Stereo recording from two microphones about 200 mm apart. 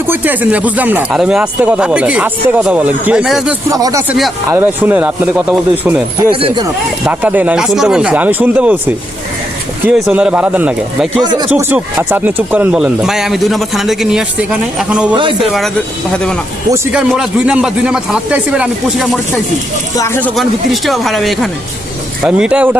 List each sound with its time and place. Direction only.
0.1 s speech: 10° right (ahead or behind)
3.7 s speech: 20° right (ahead or behind)
7.0 s speech: 10° right (ahead or behind)
9.8 s speech: 5° right (ahead or behind)
11.2 s speech: 20° right (ahead or behind)
11.7 s speech: 10° right (ahead or behind)
16.7 s speech: 15° right (ahead or behind)
20.0 s speech: 10° left (ahead or behind)
20.3 s speech: centre (ahead or behind)